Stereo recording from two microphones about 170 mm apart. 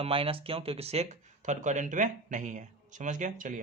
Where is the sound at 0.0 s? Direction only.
35° right (ahead or behind).